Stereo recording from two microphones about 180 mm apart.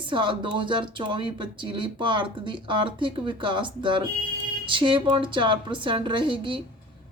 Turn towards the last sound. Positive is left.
turn(degrees=-25)  # may be behind; listen again after turning